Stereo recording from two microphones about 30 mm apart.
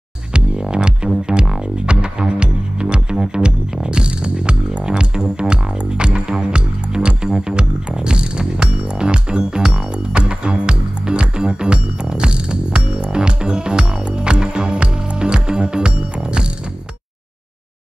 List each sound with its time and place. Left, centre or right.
0.3 s music: right